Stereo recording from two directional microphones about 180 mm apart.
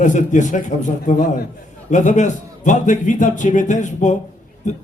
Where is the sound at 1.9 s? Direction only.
45° left (ahead or behind).